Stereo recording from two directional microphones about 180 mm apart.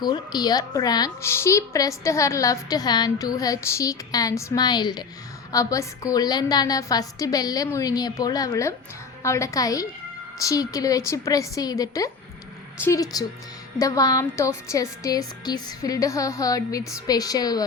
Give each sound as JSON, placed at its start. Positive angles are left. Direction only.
{"t": 0.0, "sound": "a woman's voice", "side_deg": 25}